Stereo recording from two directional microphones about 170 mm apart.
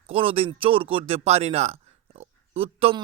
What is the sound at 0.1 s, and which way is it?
A man's voice, 35° right (ahead or behind).